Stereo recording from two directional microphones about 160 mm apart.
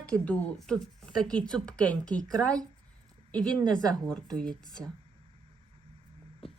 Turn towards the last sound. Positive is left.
turn(degrees=35)  # may be behind; listen again after turning